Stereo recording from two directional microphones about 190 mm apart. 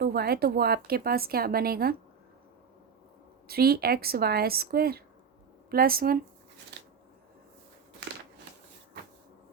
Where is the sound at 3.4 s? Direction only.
55° right (ahead or behind).